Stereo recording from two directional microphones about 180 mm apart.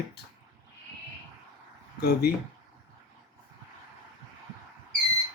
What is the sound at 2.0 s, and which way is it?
Speech, 60° left (ahead or behind).